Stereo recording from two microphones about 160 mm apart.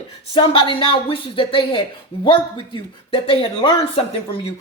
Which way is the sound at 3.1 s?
35° left (ahead or behind).